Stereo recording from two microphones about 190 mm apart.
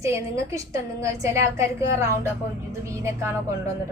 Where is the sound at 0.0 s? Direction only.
15° right (ahead or behind).